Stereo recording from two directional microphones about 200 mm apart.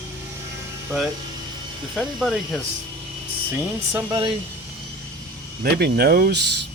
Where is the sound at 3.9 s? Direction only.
20° right (ahead or behind).